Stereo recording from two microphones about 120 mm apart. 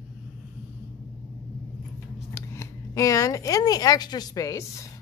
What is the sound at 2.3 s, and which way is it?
Speech, 20° left (ahead or behind).